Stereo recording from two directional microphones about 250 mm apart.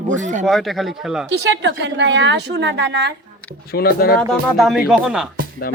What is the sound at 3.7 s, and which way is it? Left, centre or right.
Speech, left.